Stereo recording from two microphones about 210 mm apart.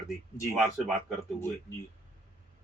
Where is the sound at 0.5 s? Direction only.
Centre (ahead or behind).